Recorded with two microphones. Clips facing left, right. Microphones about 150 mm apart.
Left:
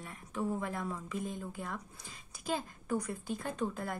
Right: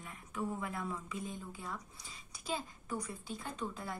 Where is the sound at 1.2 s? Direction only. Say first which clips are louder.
Left 4 dB; 55° left (ahead or behind).